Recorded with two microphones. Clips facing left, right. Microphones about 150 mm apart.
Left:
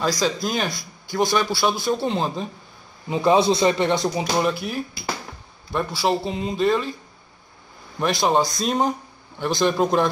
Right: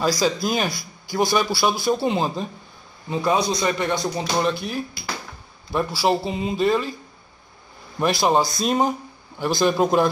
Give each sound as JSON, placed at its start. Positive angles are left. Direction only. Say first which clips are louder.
{"t": 0.0, "sound": "speech", "louder": "right 1 dB", "side_deg": -5}
{"t": 3.1, "sound": "speech", "louder": "left 4 dB", "side_deg": 25}
{"t": 8.0, "sound": "speech", "louder": "right 1 dB", "side_deg": -5}